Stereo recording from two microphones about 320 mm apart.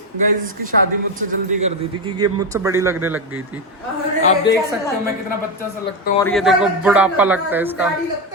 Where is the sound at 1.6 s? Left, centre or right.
Centre.